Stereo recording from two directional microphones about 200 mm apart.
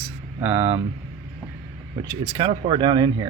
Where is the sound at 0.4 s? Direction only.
10° right (ahead or behind).